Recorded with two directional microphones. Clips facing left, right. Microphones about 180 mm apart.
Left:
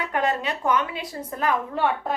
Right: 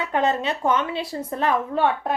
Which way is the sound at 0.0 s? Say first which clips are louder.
Right 3 dB; 25° right (ahead or behind).